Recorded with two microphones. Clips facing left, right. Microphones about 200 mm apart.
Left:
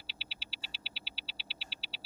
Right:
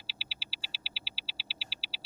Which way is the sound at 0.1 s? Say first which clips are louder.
Right 1 dB; centre (ahead or behind).